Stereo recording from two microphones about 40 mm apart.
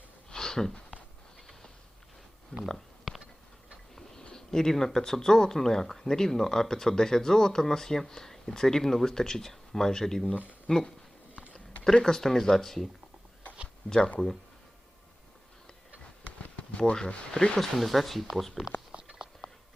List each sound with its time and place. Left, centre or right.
0.3 s a sound: centre
2.5 s speech: left
4.2 s speech: centre
12.0 s speech: centre
13.8 s speech: left
16.2 s a sound: left
17.1 s speech: left
17.6 s speech: centre
18.9 s a sound: centre